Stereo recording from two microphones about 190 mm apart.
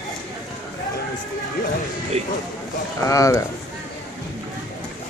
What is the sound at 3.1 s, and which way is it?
Speech, 15° left (ahead or behind).